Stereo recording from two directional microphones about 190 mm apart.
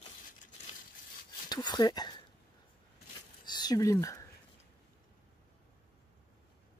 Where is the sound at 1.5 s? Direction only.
20° left (ahead or behind).